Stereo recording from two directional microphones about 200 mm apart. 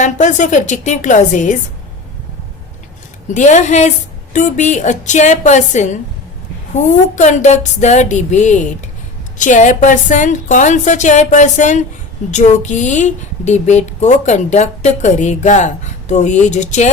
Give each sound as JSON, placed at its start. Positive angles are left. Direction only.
{"t": 0.0, "sound": "a woman's voice", "side_deg": 40}
{"t": 3.3, "sound": "a woman's voice", "side_deg": 40}